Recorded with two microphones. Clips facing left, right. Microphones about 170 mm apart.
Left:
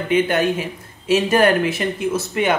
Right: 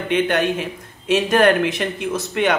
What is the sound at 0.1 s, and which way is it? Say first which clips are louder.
Speech: left 1 dB; 5° left (ahead or behind).